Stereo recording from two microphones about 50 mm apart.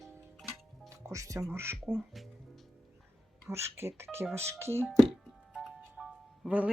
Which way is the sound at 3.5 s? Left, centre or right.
Right.